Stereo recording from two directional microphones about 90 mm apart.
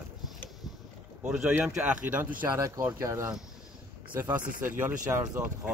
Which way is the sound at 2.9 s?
35° right (ahead or behind).